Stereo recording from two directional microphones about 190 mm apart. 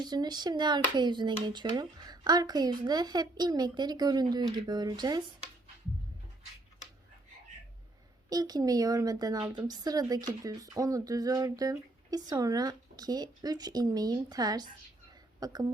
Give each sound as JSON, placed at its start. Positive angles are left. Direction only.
{"t": 0.0, "sound": "speech", "side_deg": -20}
{"t": 8.3, "sound": "speech", "side_deg": -20}